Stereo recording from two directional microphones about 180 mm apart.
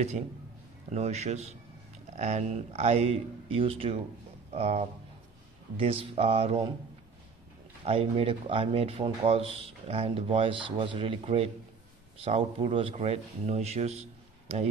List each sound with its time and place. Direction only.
0.9 s speech: 35° right (ahead or behind)
7.8 s speech: 35° right (ahead or behind)